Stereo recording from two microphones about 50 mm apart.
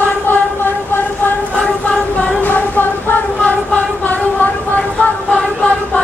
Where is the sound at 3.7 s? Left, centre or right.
Left.